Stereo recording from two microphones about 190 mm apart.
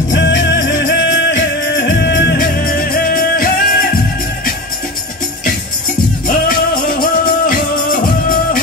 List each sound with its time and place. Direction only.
0.1 s music: 70° left (ahead or behind); by 3.9 s 50° left (ahead or behind)
6.2 s music: 50° left (ahead or behind)